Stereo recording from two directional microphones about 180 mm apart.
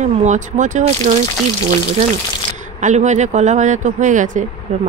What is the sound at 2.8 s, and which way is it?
Speech, 40° right (ahead or behind).